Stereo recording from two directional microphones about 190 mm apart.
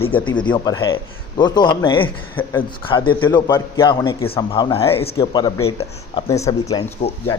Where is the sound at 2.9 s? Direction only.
25° left (ahead or behind).